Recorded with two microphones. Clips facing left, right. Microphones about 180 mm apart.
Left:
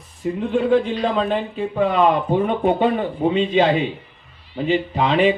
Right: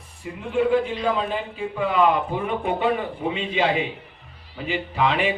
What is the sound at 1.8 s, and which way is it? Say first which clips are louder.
A man's voice: left 3 dB; 35° left (ahead or behind).